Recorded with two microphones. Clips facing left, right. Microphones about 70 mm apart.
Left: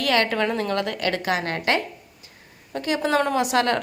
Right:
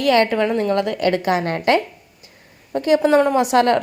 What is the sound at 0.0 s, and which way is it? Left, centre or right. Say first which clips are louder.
A woman's voice: right 5 dB; right.